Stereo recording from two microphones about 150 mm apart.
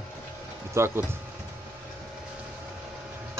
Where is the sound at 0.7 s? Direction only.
15° right (ahead or behind).